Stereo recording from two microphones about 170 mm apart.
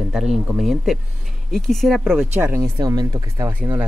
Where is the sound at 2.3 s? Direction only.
15° right (ahead or behind).